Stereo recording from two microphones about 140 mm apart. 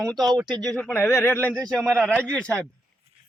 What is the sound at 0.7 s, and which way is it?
Speech, 10° left (ahead or behind).